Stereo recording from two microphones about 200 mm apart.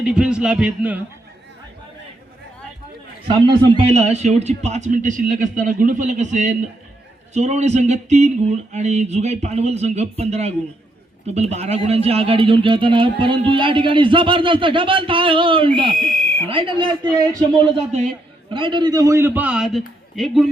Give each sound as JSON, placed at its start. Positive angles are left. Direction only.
{"t": 0.0, "sound": "a man's voice", "side_deg": -5}
{"t": 3.2, "sound": "a sound", "side_deg": -30}
{"t": 11.3, "sound": "a man's voice", "side_deg": -35}